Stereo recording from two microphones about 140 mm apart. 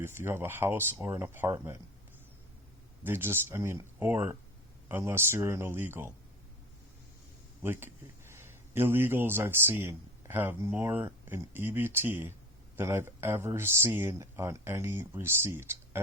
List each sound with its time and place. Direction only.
0.0 s speech: 15° right (ahead or behind)
3.0 s speech: 15° right (ahead or behind)
7.6 s a man's voice: 15° right (ahead or behind)